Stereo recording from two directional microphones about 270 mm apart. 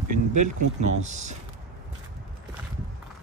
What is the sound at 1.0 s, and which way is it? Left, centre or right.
Speech, right.